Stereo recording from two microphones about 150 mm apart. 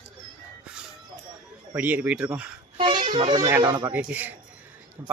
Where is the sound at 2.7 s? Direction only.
35° right (ahead or behind).